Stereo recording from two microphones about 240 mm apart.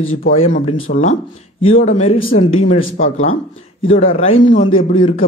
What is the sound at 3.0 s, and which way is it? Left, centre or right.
Speech, left.